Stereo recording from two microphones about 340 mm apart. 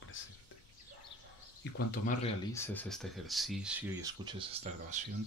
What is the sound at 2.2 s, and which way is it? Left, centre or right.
Speech, centre.